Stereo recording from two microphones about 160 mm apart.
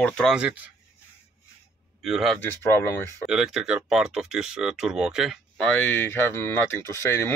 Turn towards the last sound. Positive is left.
turn(degrees=15)  # may be behind; listen again after turning